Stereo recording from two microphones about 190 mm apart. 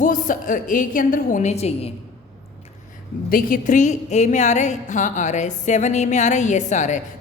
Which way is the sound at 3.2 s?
50° left (ahead or behind).